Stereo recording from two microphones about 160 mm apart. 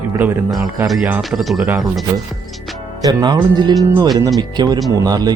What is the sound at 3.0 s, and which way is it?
Speech, 25° right (ahead or behind).